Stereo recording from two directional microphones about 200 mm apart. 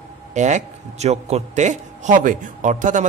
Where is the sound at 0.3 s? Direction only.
35° right (ahead or behind).